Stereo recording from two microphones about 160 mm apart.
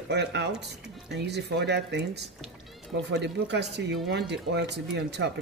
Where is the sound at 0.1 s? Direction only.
90° right.